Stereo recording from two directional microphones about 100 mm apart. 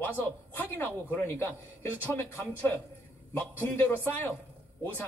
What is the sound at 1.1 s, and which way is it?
Speech, 25° left (ahead or behind).